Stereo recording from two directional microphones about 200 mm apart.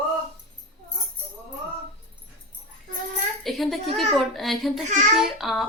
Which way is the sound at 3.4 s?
Centre (ahead or behind).